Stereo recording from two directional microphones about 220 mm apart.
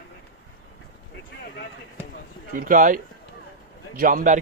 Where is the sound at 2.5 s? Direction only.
40° right (ahead or behind).